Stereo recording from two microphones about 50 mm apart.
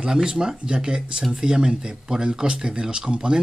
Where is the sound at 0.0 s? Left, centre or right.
Centre.